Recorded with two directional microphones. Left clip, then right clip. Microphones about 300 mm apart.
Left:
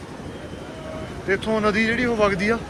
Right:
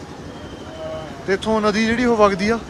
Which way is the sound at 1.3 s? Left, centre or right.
Centre.